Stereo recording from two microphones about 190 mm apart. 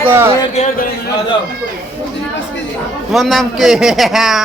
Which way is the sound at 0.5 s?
40° left (ahead or behind).